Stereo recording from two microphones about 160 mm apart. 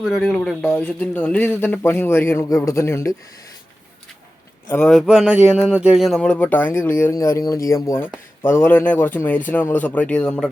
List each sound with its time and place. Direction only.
0.0 s speech: centre (ahead or behind); by 3.2 s 20° left (ahead or behind)
4.7 s speech: 5° left (ahead or behind)